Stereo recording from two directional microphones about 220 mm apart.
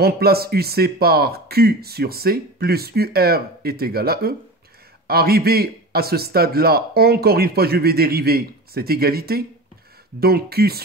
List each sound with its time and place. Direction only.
0.0 s speech: 45° right (ahead or behind)